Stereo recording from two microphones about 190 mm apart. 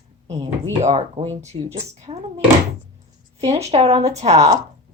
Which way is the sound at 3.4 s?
35° right (ahead or behind).